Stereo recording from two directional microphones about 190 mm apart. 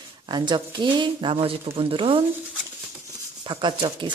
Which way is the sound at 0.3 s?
25° right (ahead or behind).